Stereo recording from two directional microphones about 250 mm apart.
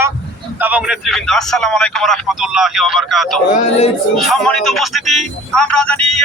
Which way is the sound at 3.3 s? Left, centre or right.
Left.